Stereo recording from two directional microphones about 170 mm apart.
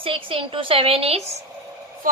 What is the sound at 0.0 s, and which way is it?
A woman's voice, 30° right (ahead or behind).